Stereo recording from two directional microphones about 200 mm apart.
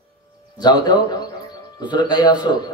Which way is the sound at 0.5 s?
20° left (ahead or behind).